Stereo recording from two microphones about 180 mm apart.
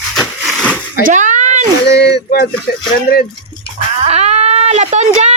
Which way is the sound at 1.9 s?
65° left (ahead or behind).